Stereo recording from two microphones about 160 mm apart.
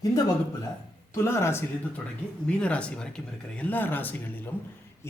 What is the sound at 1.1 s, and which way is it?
Speech, 15° left (ahead or behind).